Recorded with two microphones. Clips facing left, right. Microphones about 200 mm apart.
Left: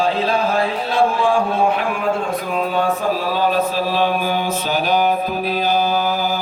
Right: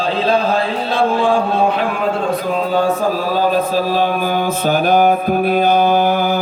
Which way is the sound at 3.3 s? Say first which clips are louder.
Right 3 dB; 45° right (ahead or behind).